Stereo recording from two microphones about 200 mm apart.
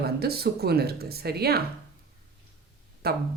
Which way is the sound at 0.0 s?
50° right (ahead or behind).